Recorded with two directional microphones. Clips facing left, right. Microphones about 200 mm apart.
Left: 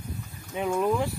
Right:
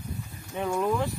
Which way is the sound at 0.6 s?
10° left (ahead or behind).